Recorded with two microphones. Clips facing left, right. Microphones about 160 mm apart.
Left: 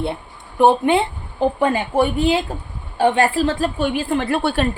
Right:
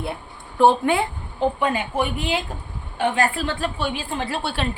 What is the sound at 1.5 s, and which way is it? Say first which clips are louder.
A woman's voice: left 5 dB; 45° left (ahead or behind).